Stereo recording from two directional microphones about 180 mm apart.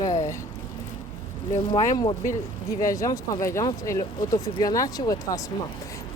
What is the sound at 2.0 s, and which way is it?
Speech, 20° left (ahead or behind).